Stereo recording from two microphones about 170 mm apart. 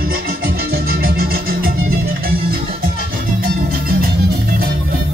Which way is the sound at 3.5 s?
60° right (ahead or behind).